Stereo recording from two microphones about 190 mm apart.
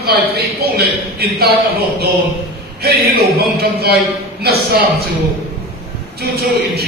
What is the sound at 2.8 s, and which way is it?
A man's voice, 55° right (ahead or behind).